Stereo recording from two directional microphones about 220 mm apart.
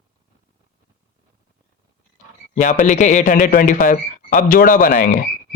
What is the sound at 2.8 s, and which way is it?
Speech, 35° left (ahead or behind).